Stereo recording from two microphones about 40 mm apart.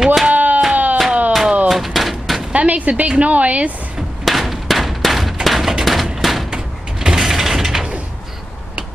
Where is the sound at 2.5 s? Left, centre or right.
Right.